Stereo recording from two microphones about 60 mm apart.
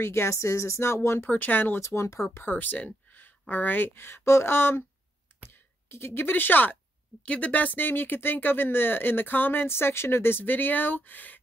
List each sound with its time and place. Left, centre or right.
0.0 s speech: left
1.2 s speech: left
1.8 s speech: left
2.4 s speech: left